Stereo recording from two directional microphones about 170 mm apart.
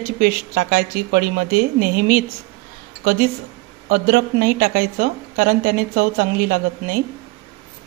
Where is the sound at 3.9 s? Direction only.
60° right (ahead or behind).